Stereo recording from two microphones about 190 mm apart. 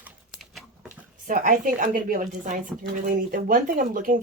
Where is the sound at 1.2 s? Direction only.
45° right (ahead or behind).